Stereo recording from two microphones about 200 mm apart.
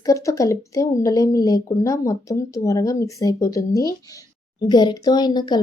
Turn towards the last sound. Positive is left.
turn(degrees=20)  # may be behind; listen again after turning